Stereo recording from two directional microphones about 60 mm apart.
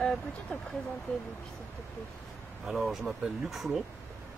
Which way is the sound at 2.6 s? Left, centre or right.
Centre.